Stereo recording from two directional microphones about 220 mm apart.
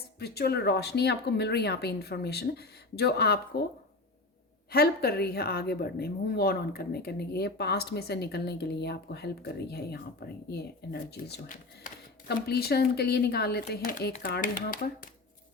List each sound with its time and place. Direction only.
0.2 s a woman's voice: 45° left (ahead or behind)
4.7 s a woman's voice: 45° left (ahead or behind)